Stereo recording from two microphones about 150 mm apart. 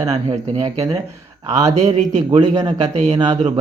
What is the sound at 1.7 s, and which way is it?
Speech, 50° right (ahead or behind).